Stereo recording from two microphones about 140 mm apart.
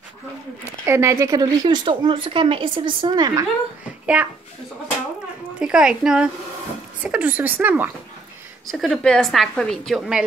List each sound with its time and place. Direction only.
0.8 s a woman's voice: 15° right (ahead or behind)
4.0 s a child's voice: 10° right (ahead or behind)
5.6 s a woman's voice: 5° right (ahead or behind)
8.7 s a woman's voice: centre (ahead or behind)